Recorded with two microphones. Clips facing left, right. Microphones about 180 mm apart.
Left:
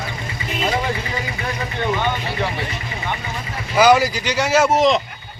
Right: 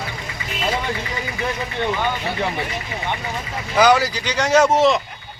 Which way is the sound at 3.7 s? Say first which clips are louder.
Left 2 dB; 10° left (ahead or behind).